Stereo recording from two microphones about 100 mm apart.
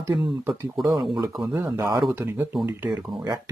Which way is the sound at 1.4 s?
25° right (ahead or behind).